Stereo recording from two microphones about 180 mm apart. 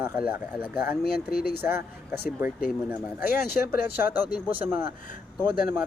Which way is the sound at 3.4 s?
60° left (ahead or behind).